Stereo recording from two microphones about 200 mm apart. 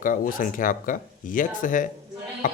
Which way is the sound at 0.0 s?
45° left (ahead or behind).